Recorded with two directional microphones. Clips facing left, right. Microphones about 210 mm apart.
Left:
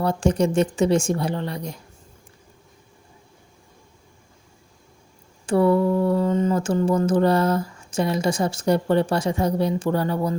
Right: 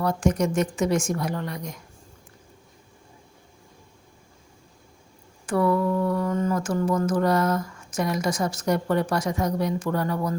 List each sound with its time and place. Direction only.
0.0 s speech: 30° left (ahead or behind)
5.5 s speech: 30° left (ahead or behind)